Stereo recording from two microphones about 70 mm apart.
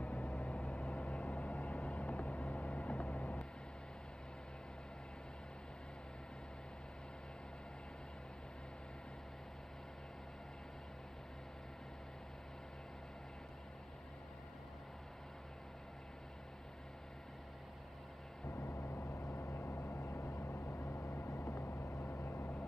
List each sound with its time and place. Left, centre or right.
0.0 s vehicle: centre
18.5 s vehicle: left